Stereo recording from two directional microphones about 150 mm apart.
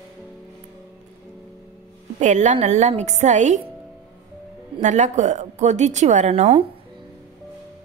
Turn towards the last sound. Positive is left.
turn(degrees=-45)  # may be behind; listen again after turning